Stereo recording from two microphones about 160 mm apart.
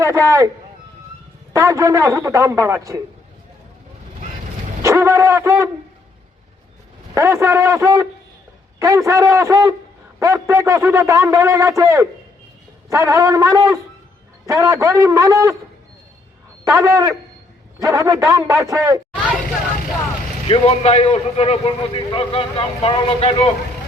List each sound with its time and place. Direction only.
0.0 s speech: 20° right (ahead or behind)
1.5 s speech: 20° right (ahead or behind)
4.8 s a man's voice: 20° right (ahead or behind)
7.1 s speech: 20° right (ahead or behind)
16.6 s speech: 20° right (ahead or behind)
20.5 s a man's voice: 40° left (ahead or behind)